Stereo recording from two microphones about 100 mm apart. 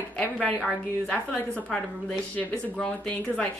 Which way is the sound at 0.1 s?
15° left (ahead or behind).